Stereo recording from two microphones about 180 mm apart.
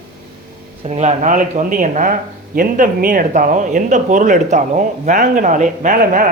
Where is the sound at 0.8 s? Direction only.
40° right (ahead or behind).